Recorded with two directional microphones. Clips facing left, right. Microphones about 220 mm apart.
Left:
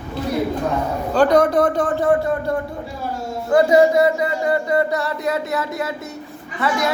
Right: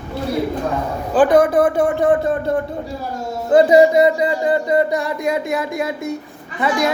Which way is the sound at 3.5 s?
20° right (ahead or behind).